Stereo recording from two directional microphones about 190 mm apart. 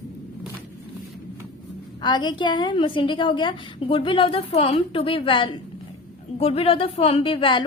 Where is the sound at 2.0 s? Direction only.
25° left (ahead or behind).